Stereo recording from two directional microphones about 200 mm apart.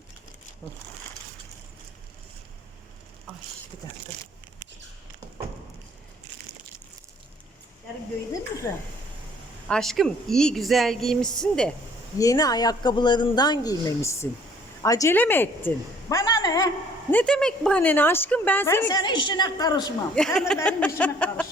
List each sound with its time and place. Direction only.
0.6 s speech: 15° left (ahead or behind)
8.7 s a woman's voice: 10° left (ahead or behind)
12.2 s a woman's voice: 20° left (ahead or behind)
19.0 s speech: 20° left (ahead or behind)
20.1 s a woman's voice: 5° left (ahead or behind)